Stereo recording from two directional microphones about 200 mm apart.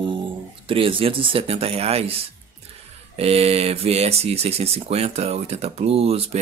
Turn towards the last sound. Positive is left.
turn(degrees=-30)  # may be behind; listen again after turning